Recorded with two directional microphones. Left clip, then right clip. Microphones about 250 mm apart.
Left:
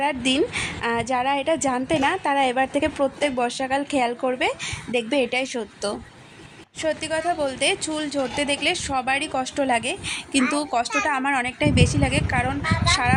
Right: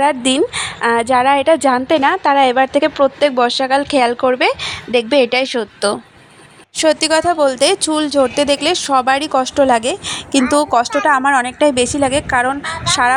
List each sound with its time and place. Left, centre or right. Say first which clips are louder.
0.0 s a woman's voice: right 8 dB; centre